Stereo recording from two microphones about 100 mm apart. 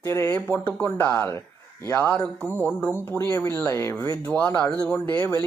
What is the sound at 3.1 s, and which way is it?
Speech, 30° left (ahead or behind).